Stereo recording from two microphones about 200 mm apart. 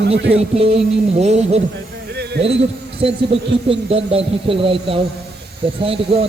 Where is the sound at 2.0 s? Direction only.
55° right (ahead or behind).